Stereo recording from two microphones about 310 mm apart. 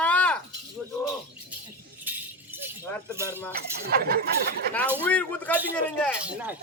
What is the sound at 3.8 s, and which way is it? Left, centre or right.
Speech, right.